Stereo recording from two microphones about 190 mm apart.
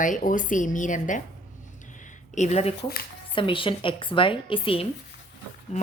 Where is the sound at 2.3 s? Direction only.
35° left (ahead or behind).